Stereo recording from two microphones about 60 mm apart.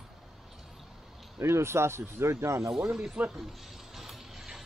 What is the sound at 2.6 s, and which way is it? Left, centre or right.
Speech, centre.